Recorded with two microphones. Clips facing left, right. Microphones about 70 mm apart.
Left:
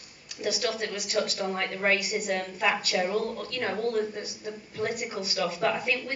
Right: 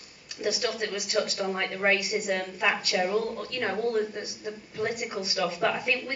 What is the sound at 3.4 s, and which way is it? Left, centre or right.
A woman's voice, centre.